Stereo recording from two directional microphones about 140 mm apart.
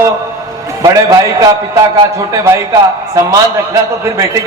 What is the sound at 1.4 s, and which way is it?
A man's voice, 20° right (ahead or behind).